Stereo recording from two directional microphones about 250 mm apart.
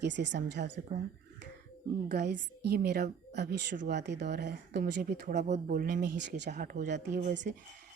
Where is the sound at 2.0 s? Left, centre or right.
Right.